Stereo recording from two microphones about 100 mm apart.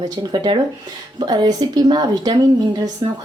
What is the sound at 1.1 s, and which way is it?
A woman's voice, 45° right (ahead or behind).